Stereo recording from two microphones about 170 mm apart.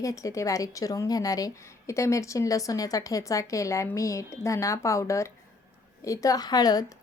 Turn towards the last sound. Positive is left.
turn(degrees=20)  # may be behind; listen again after turning